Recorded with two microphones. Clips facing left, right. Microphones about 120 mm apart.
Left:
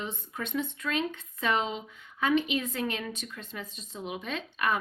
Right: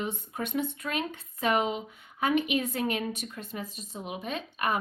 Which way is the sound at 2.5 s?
45° right (ahead or behind).